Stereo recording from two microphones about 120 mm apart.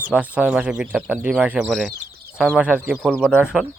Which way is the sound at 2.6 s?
10° right (ahead or behind).